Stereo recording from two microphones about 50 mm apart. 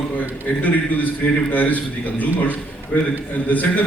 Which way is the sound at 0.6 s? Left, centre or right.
Left.